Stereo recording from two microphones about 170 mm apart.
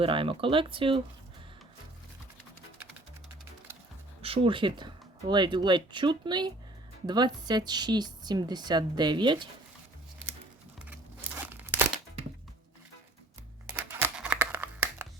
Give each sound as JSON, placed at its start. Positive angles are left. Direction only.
{"t": 0.0, "sound": "speech", "side_deg": -30}
{"t": 4.2, "sound": "a woman's voice", "side_deg": -35}
{"t": 10.8, "sound": "a sound", "side_deg": -10}
{"t": 13.8, "sound": "music", "side_deg": -10}